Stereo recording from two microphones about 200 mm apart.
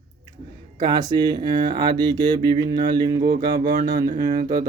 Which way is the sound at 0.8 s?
20° right (ahead or behind).